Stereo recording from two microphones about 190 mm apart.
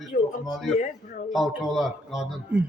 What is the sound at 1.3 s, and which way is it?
A man's voice, centre (ahead or behind).